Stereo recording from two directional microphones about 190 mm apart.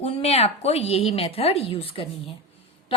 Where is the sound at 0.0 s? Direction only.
30° left (ahead or behind).